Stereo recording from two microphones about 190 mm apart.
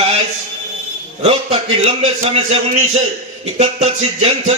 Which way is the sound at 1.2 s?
30° right (ahead or behind).